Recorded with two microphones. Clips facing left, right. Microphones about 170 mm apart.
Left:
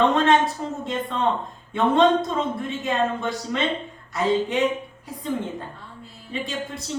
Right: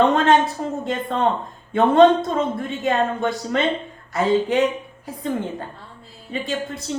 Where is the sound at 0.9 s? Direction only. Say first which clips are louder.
Right 2 dB; 50° right (ahead or behind).